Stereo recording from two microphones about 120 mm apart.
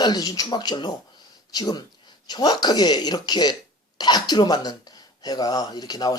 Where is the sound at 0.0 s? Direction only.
35° left (ahead or behind).